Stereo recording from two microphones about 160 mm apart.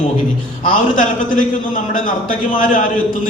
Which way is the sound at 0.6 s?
55° left (ahead or behind).